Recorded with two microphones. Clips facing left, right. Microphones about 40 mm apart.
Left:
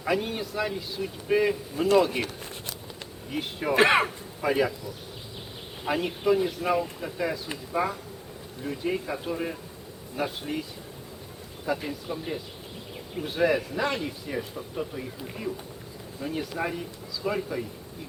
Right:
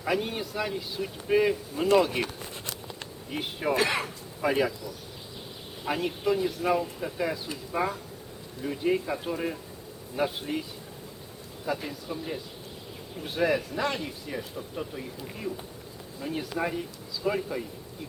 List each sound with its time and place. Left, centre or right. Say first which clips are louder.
0.0 s speech: left 1 dB; centre
3.3 s speech: left 1 dB; centre
3.8 s speech: left 9 dB; left
4.4 s speech: left 1 dB; centre
5.8 s speech: left 2 dB; centre
11.6 s speech: left 2 dB; centre